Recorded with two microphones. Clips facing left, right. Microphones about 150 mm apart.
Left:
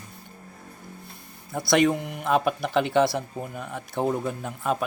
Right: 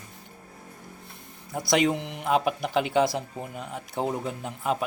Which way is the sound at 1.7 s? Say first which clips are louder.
Left 3 dB; 15° right (ahead or behind).